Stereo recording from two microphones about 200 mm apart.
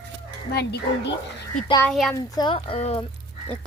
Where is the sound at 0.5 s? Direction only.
55° left (ahead or behind).